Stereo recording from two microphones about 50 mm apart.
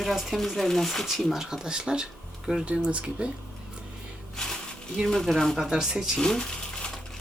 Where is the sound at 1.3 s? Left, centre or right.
Centre.